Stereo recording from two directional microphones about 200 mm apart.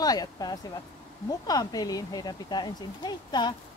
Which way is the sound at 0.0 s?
20° left (ahead or behind).